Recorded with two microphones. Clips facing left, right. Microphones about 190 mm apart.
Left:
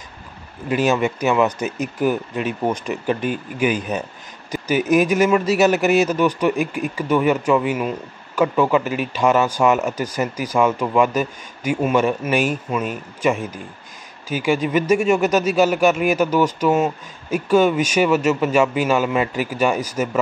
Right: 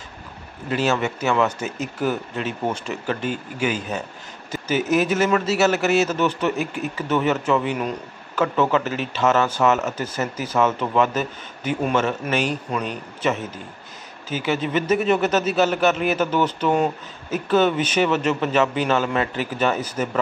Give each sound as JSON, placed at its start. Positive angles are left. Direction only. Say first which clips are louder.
{"t": 0.7, "sound": "speech", "louder": "left 3 dB", "side_deg": 15}